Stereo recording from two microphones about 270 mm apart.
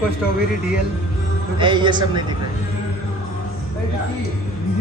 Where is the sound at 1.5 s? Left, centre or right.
Centre.